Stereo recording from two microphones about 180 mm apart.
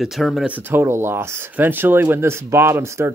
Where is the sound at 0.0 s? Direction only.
Centre (ahead or behind).